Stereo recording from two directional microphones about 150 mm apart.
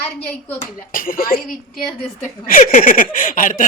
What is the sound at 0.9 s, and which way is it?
Speech, 65° left (ahead or behind).